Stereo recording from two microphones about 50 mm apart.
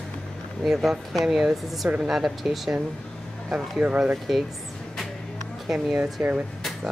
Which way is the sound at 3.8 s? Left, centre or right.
Right.